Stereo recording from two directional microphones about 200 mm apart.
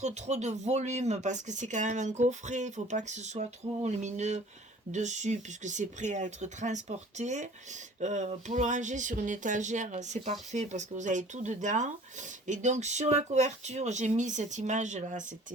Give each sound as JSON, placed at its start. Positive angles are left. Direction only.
{"t": 0.0, "sound": "speech", "side_deg": -35}